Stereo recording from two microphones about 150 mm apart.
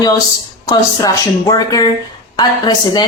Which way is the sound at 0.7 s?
25° left (ahead or behind).